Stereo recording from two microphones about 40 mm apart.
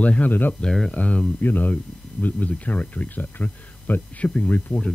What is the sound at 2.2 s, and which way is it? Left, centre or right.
Speech, left.